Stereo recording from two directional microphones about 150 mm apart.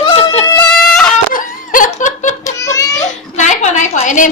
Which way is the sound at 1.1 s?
60° left (ahead or behind).